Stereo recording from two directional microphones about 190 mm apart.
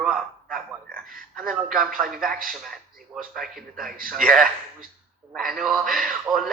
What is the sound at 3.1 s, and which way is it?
Speech, centre (ahead or behind).